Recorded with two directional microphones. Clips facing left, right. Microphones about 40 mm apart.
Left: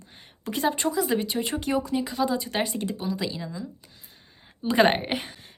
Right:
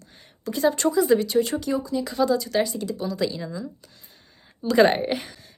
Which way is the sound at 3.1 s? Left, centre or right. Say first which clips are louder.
Right 3 dB; centre.